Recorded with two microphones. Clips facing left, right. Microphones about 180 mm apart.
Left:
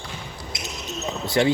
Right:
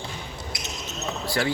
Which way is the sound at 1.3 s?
20° left (ahead or behind).